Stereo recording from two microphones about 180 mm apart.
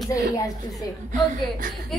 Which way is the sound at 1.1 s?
45° right (ahead or behind).